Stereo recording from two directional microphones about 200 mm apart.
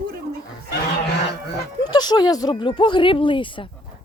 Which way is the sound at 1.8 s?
20° left (ahead or behind).